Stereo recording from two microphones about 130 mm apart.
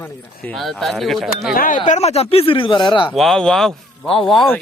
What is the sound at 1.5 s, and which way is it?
Speech, 90° left.